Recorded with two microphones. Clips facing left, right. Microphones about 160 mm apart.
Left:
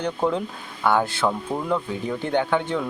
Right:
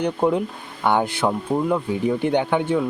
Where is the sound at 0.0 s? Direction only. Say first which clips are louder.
Right 4 dB; 15° right (ahead or behind).